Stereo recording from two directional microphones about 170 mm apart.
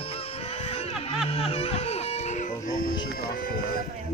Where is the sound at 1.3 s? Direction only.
35° left (ahead or behind).